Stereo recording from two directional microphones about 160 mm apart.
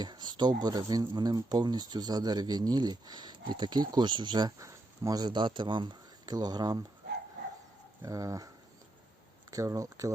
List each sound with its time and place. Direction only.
0.0 s speech: 25° right (ahead or behind)
8.0 s speech: 20° right (ahead or behind)
9.5 s speech: 20° right (ahead or behind)